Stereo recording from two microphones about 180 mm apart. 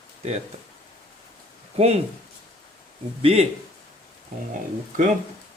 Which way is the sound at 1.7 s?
35° right (ahead or behind).